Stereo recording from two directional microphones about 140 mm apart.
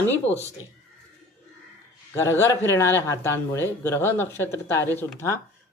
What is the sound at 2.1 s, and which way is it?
Speech, 20° left (ahead or behind).